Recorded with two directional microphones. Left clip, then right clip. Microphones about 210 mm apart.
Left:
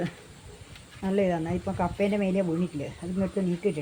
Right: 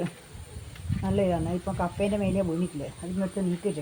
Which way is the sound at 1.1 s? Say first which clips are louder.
Even; 20° left (ahead or behind).